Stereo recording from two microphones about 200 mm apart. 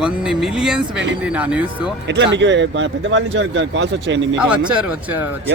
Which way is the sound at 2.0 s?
60° right (ahead or behind).